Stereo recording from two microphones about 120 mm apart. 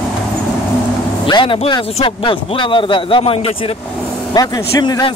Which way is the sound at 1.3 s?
45° left (ahead or behind).